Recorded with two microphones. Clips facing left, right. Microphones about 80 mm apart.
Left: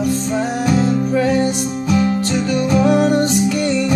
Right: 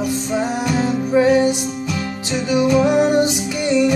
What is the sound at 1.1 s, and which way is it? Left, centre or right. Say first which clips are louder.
Music: right 6 dB; centre.